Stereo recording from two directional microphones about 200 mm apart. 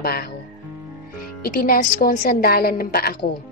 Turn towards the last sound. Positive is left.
turn(degrees=50)  # may be behind; listen again after turning